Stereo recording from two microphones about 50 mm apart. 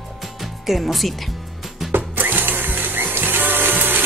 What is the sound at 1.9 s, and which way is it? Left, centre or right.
Music, right.